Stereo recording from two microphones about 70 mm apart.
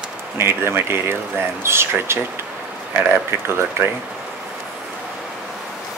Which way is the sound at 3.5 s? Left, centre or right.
Right.